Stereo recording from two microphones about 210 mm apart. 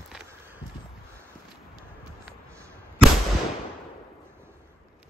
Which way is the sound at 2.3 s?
10° right (ahead or behind).